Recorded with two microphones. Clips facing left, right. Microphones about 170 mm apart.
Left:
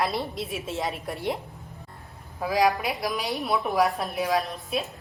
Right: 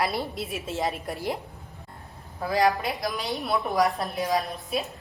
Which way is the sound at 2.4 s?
10° left (ahead or behind).